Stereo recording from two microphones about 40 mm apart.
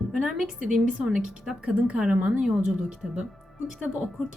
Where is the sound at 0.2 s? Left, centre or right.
Centre.